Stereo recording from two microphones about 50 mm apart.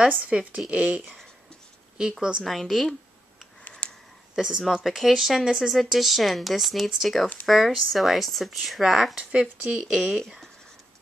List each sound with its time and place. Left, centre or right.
0.3 s speech: right
2.0 s speech: centre
2.4 s speech: centre
3.8 s a sound: left
4.4 s speech: centre
4.7 s speech: centre
5.7 s speech: centre
9.1 s speech: right